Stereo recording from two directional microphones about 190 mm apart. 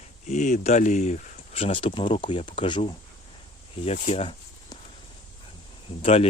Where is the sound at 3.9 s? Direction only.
35° left (ahead or behind).